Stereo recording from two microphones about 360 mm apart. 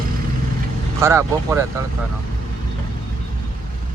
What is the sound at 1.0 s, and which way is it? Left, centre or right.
Speech, centre.